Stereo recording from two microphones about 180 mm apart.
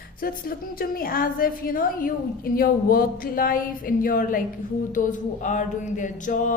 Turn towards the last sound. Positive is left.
turn(degrees=45)  # may be behind; listen again after turning